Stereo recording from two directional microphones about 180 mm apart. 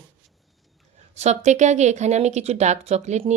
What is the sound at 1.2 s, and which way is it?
Speech, 40° right (ahead or behind).